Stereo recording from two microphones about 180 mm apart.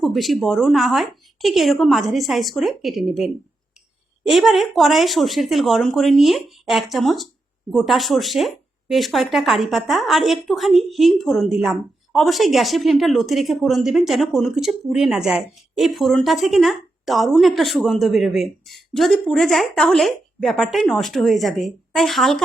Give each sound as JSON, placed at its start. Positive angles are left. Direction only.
{"t": 0.0, "sound": "speech", "side_deg": 0}